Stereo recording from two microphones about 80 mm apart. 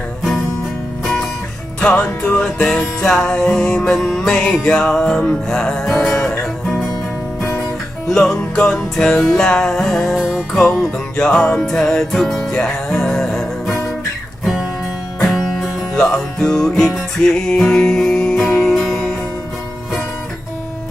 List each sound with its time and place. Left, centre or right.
0.2 s music: centre
1.8 s music: centre
8.0 s music: centre
16.0 s music: centre